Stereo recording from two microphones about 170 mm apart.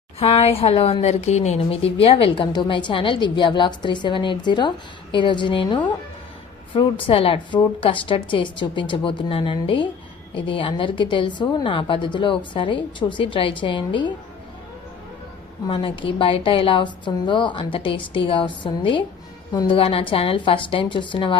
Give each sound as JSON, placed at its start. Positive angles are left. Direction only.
{"t": 0.2, "sound": "a woman's voice", "side_deg": 35}
{"t": 15.6, "sound": "a woman's voice", "side_deg": 30}